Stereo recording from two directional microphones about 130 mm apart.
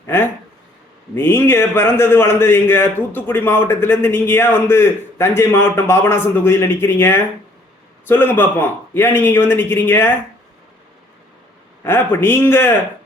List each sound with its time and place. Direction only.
0.0 s a man's voice: 20° left (ahead or behind)
11.8 s a man's voice: 20° left (ahead or behind)